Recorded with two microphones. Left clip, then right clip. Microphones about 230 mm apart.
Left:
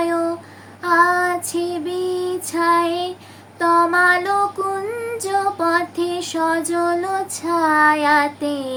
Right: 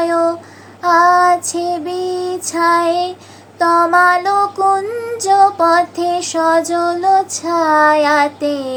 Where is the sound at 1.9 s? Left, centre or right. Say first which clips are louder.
Right 3 dB; left.